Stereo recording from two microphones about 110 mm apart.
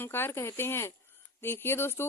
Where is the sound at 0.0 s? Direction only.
20° left (ahead or behind).